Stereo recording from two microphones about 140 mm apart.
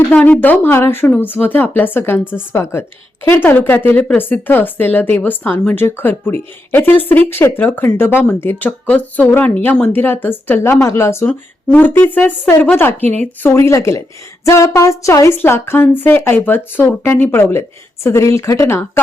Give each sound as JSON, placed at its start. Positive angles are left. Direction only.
{"t": 0.1, "sound": "speech", "side_deg": 10}